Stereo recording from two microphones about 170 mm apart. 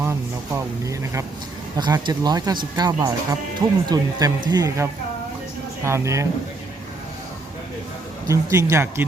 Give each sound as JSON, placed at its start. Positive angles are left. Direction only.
{"t": 0.0, "sound": "speech", "side_deg": -15}
{"t": 8.3, "sound": "speech", "side_deg": -20}